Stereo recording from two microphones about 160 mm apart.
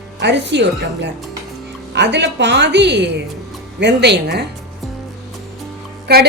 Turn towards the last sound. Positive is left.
turn(degrees=-85)